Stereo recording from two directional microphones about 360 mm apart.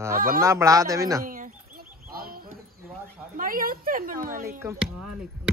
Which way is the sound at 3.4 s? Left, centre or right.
Right.